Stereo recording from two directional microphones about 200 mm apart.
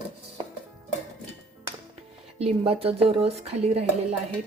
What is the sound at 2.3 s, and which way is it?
Speech, 30° right (ahead or behind).